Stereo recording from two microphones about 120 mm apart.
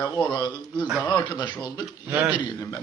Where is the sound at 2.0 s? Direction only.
15° right (ahead or behind).